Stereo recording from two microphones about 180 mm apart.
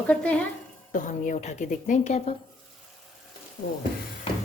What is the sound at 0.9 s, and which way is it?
A woman's voice, 45° left (ahead or behind).